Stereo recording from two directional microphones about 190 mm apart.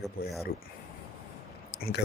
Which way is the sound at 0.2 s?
55° left (ahead or behind).